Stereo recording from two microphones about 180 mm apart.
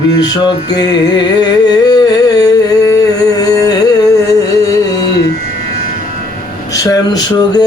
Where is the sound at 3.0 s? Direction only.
20° left (ahead or behind).